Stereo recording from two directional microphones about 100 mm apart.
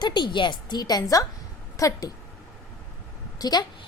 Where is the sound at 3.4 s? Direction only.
45° left (ahead or behind).